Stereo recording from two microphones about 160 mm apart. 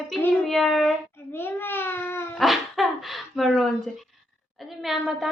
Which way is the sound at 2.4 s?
Centre (ahead or behind).